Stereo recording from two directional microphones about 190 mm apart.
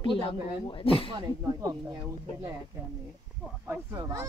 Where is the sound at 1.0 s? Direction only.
25° right (ahead or behind).